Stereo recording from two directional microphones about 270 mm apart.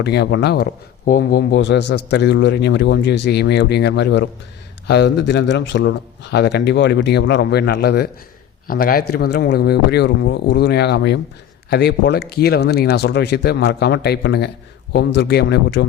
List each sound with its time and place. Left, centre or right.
0.0 s a man's voice: left